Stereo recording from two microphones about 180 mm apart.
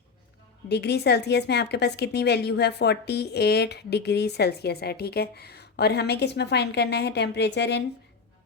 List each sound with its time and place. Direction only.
0.7 s a woman's voice: 70° left (ahead or behind)